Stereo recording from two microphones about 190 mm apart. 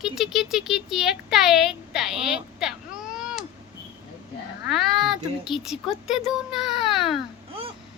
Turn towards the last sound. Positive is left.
turn(degrees=0)  # may be behind; listen again after turning